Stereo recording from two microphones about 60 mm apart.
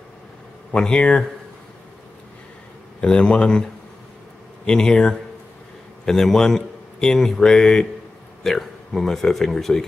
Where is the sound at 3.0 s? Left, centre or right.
Centre.